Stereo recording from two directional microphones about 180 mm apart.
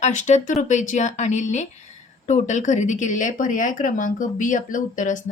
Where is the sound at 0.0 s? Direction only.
40° left (ahead or behind).